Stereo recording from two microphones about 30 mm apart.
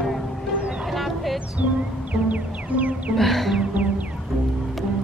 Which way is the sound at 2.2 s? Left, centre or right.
Right.